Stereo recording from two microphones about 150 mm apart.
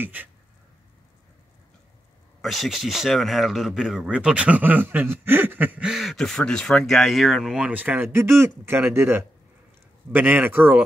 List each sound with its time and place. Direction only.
0.0 s speech: 10° right (ahead or behind)
2.4 s speech: centre (ahead or behind)